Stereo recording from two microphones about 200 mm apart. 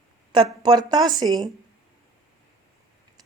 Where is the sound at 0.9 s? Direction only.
20° right (ahead or behind).